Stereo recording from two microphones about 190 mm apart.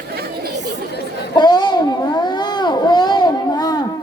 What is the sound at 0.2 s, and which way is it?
Chatter, 60° right (ahead or behind).